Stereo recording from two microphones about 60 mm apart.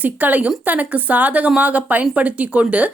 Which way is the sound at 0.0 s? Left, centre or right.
Right.